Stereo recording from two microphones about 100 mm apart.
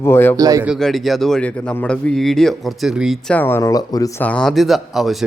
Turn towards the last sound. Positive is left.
turn(degrees=0)  # may be behind; listen again after turning